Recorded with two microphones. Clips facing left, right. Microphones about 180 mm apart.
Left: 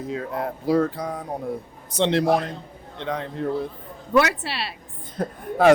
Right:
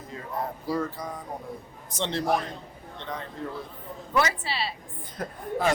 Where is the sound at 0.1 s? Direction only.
85° left.